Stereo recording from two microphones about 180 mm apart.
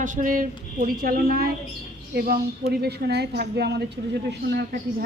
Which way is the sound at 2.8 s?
65° right (ahead or behind).